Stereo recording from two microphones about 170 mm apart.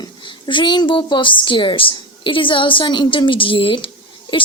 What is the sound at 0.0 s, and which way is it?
A woman's voice, 30° left (ahead or behind).